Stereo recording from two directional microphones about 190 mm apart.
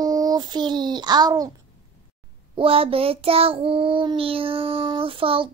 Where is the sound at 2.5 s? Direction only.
30° right (ahead or behind).